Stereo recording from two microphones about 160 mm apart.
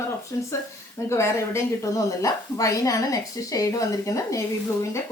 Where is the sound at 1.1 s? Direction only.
15° left (ahead or behind).